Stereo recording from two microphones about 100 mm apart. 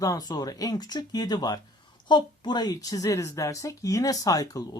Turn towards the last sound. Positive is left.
turn(degrees=35)  # may be behind; listen again after turning